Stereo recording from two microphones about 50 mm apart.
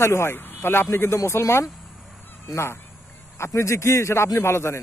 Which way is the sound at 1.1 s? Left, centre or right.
Left.